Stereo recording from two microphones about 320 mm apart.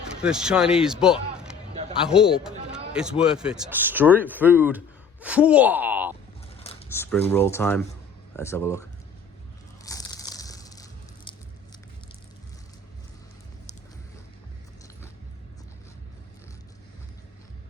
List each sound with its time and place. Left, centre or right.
0.2 s a man's voice: centre
6.6 s a sound: centre
6.9 s speech: centre
9.8 s crushing: centre